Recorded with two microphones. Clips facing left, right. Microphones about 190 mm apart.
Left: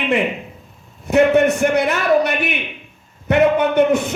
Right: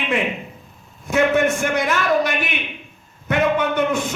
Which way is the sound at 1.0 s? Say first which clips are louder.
Left 4 dB; 60° left (ahead or behind).